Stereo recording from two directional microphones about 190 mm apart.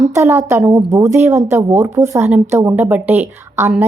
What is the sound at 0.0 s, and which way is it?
A woman's voice, 15° right (ahead or behind).